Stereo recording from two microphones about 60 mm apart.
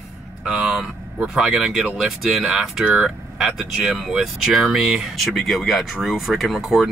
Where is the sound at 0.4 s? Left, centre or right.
Centre.